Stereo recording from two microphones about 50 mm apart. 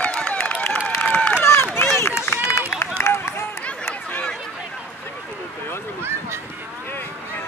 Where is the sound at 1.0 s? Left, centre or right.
Left.